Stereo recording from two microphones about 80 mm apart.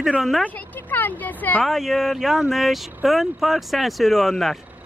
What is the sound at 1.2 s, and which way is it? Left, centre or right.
Speech, left.